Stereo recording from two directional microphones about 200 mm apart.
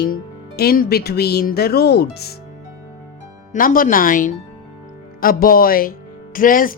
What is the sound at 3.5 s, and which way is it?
Speech, 45° left (ahead or behind).